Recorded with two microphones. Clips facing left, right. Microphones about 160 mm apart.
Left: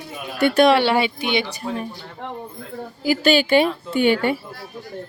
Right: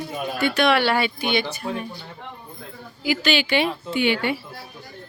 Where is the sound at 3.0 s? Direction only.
45° left (ahead or behind).